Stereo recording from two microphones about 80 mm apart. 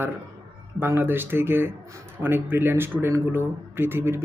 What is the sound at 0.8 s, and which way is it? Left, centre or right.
Speech, right.